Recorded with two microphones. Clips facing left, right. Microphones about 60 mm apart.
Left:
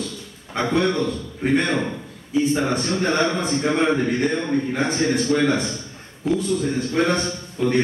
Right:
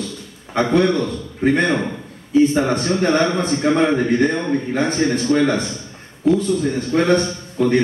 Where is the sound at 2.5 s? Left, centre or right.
Right.